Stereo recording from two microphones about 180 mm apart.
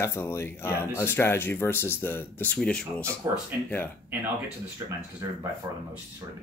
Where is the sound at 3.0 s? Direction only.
15° right (ahead or behind).